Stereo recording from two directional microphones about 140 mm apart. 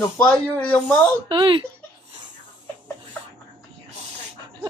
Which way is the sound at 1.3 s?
35° right (ahead or behind).